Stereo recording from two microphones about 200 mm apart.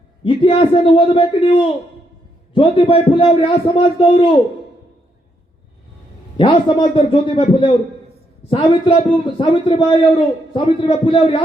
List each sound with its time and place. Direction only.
0.3 s a man's voice: 25° left (ahead or behind)
6.3 s a man's voice: 25° left (ahead or behind)